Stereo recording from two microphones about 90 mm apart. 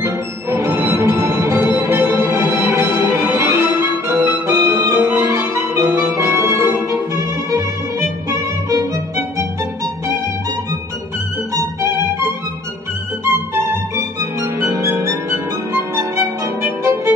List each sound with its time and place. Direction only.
0.0 s music: 35° right (ahead or behind)
8.3 s violin: 35° right (ahead or behind)
11.8 s music: 30° right (ahead or behind)